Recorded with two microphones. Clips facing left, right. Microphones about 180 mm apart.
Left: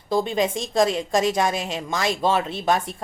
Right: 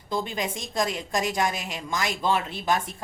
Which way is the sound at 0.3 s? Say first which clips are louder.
Left 8 dB; 25° left (ahead or behind).